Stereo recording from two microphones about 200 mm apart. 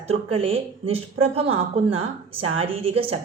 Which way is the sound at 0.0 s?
30° right (ahead or behind).